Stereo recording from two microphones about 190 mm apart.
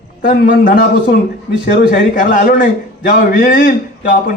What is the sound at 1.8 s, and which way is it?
A man's voice, 50° left (ahead or behind).